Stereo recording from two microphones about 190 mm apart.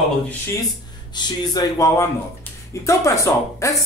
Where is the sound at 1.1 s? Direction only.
20° left (ahead or behind).